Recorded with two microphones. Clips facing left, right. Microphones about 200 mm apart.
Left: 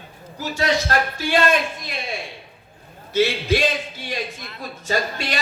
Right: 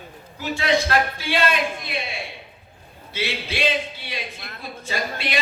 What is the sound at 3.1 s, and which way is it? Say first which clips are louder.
Speech: left 9 dB; 45° left (ahead or behind).